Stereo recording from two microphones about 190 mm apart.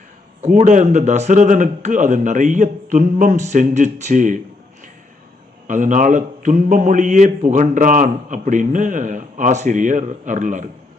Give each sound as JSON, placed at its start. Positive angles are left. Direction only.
{"t": 0.4, "sound": "a man's voice", "side_deg": -40}
{"t": 5.6, "sound": "a man's voice", "side_deg": -40}